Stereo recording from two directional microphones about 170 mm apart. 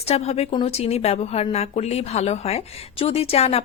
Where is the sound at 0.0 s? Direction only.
35° left (ahead or behind).